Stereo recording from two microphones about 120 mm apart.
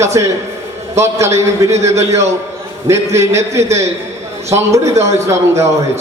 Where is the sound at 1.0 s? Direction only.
25° right (ahead or behind).